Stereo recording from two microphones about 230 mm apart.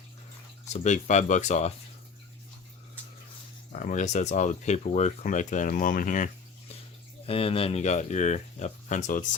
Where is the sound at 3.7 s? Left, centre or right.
Left.